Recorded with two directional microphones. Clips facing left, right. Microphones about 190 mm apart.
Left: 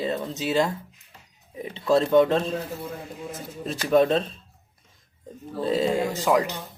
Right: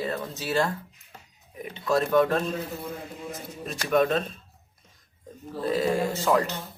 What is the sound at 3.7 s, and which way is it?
Speech, 30° left (ahead or behind).